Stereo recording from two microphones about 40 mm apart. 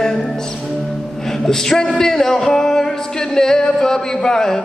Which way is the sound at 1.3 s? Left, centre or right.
Centre.